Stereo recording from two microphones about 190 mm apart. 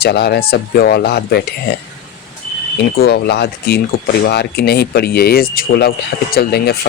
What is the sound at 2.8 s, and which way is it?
Speech, 55° left (ahead or behind).